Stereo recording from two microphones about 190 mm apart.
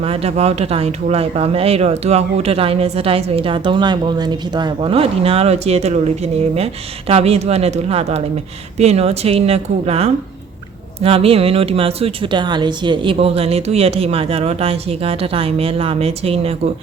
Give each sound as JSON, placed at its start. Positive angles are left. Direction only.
{"t": 0.0, "sound": "speech", "side_deg": -30}